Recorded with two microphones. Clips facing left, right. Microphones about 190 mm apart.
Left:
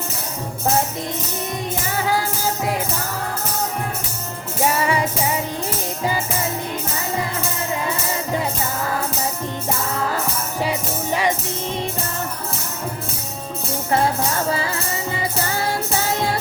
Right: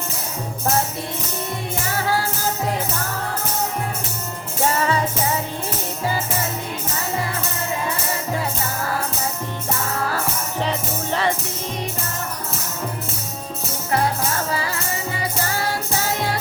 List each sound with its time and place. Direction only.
2.0 s music: 15° left (ahead or behind)
4.6 s music: 10° left (ahead or behind)
10.6 s music: 10° left (ahead or behind)